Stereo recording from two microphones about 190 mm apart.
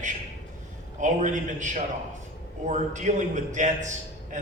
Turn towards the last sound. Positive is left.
turn(degrees=-40)  # may be behind; listen again after turning